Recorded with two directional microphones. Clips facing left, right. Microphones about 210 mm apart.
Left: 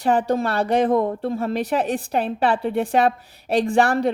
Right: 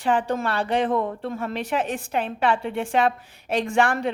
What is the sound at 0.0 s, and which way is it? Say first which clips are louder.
A woman's voice: left 3 dB; 40° left (ahead or behind).